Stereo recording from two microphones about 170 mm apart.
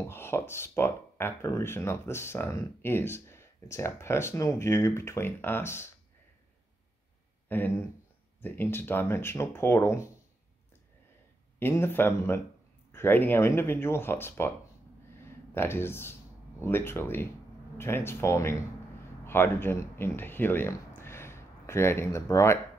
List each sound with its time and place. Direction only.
0.0 s speech: 15° left (ahead or behind)
7.4 s speech: 10° left (ahead or behind)
11.6 s speech: 15° left (ahead or behind)
15.5 s speech: 15° left (ahead or behind)